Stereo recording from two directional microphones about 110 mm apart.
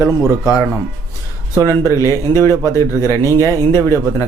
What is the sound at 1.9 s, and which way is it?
Speech, 30° left (ahead or behind).